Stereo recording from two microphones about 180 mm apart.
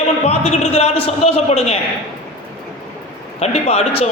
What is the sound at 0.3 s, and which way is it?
A man's voice, 35° left (ahead or behind).